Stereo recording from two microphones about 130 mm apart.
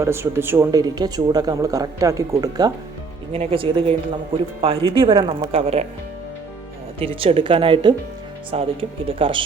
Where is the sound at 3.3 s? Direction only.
50° right (ahead or behind).